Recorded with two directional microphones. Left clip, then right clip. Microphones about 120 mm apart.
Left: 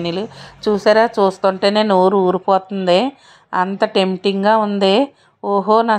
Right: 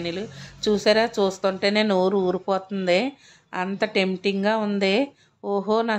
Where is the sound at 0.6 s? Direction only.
10° left (ahead or behind).